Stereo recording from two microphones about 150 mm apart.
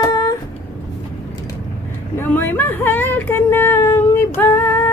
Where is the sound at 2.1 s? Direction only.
15° left (ahead or behind).